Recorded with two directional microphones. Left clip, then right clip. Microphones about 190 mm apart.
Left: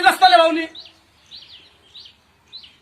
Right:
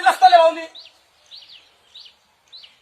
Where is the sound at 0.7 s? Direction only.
50° right (ahead or behind).